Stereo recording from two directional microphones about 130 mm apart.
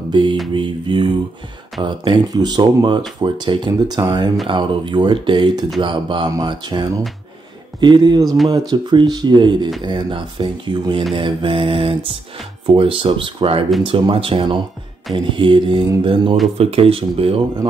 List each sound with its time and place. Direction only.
0.1 s music: 35° right (ahead or behind)
0.5 s speech: 40° right (ahead or behind)
11.1 s mantra: 40° right (ahead or behind)
12.6 s speech: 40° right (ahead or behind)
13.8 s mantra: 45° right (ahead or behind)
15.1 s speech: 40° right (ahead or behind)
16.0 s mantra: 40° right (ahead or behind)